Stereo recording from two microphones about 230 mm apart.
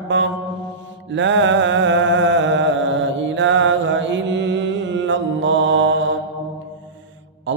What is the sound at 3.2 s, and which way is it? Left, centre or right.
Mantra, right.